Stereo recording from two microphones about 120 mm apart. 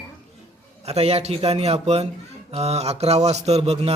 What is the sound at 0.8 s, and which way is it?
A man's voice, 60° right (ahead or behind).